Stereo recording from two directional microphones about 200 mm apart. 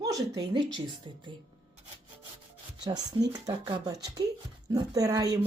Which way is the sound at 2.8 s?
20° right (ahead or behind).